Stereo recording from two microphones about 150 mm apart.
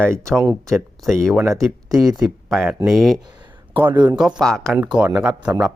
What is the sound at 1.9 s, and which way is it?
Speech, 25° right (ahead or behind).